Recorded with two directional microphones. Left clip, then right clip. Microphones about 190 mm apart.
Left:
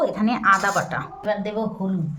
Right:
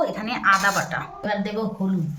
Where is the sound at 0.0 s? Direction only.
50° left (ahead or behind).